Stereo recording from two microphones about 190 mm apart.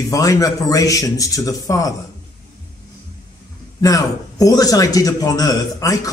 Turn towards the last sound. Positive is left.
turn(degrees=20)  # may be behind; listen again after turning